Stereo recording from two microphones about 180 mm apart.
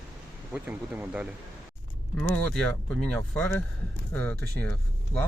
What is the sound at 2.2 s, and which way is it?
Speech, 5° left (ahead or behind).